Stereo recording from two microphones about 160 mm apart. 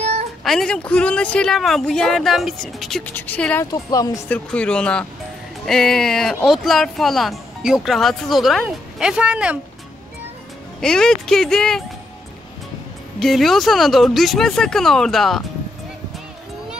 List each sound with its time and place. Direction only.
0.4 s speech: centre (ahead or behind)
3.7 s speech: 20° left (ahead or behind)
4.3 s speech: 5° left (ahead or behind)
10.8 s speech: 5° left (ahead or behind)
13.2 s speech: centre (ahead or behind)